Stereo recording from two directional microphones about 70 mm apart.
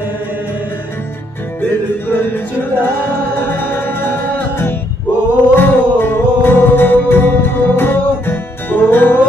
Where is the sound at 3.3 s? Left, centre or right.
Left.